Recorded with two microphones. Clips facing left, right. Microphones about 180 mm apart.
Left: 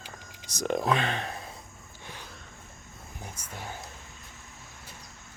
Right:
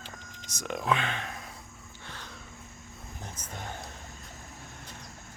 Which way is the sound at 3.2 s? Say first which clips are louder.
Even; 10° left (ahead or behind).